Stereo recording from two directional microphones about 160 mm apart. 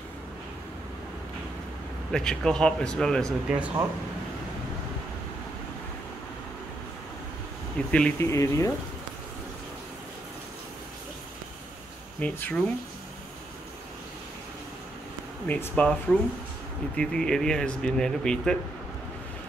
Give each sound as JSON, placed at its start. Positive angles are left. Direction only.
{"t": 2.1, "sound": "speech", "side_deg": 5}
{"t": 3.4, "sound": "speech", "side_deg": -5}
{"t": 7.9, "sound": "speech", "side_deg": 5}
{"t": 8.3, "sound": "speech", "side_deg": 20}
{"t": 12.2, "sound": "speech", "side_deg": 10}
{"t": 15.4, "sound": "speech", "side_deg": 10}